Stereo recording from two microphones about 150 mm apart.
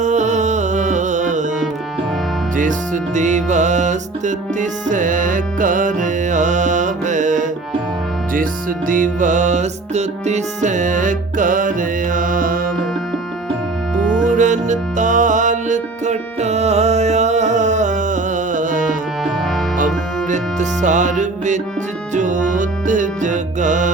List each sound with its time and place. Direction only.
0.0 s music: 50° right (ahead or behind)
2.6 s music: 55° right (ahead or behind)
8.9 s music: 60° right (ahead or behind)
14.2 s music: 55° right (ahead or behind)
20.3 s music: 55° right (ahead or behind)